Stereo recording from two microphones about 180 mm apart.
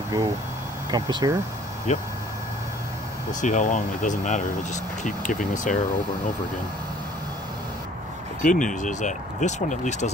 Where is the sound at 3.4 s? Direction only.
45° left (ahead or behind).